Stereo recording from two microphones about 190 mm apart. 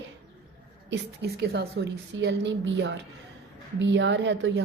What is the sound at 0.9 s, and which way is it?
A woman's voice, 60° right (ahead or behind).